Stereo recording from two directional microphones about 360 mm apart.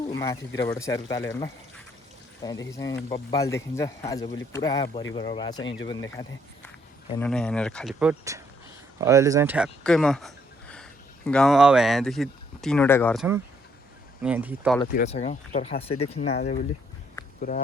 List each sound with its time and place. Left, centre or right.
0.2 s speech: centre
14.9 s speech: centre